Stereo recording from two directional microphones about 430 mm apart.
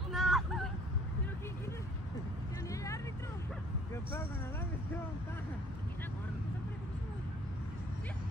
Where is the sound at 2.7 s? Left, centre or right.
Centre.